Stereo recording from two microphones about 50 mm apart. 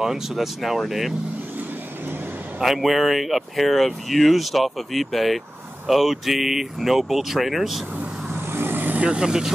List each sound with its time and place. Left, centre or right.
0.0 s speech: centre
2.6 s speech: centre
8.5 s vehicle: right
9.0 s speech: centre